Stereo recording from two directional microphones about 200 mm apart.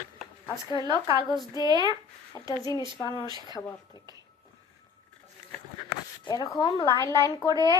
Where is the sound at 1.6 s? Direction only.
20° right (ahead or behind).